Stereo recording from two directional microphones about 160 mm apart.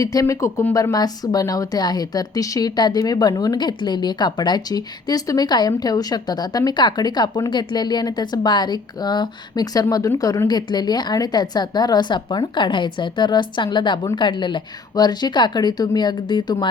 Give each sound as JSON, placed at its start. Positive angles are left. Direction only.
{"t": 0.0, "sound": "speech", "side_deg": 25}